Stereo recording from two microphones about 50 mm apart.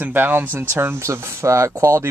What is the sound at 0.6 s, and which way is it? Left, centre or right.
Speech, right.